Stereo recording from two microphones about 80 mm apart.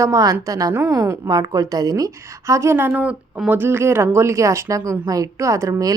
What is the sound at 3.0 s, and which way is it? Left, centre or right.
Speech, centre.